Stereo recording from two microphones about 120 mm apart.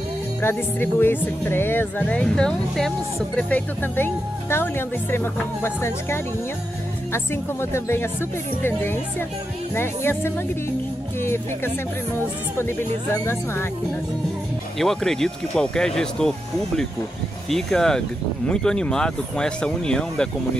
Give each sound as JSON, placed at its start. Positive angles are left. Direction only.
{"t": 0.4, "sound": "speech", "side_deg": 20}
{"t": 7.7, "sound": "speech", "side_deg": 20}
{"t": 14.8, "sound": "speech", "side_deg": 5}